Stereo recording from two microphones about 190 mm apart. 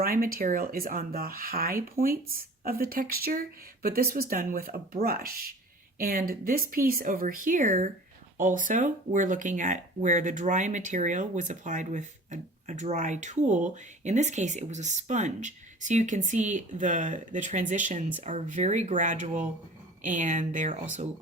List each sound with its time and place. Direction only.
0.0 s speech: 50° right (ahead or behind)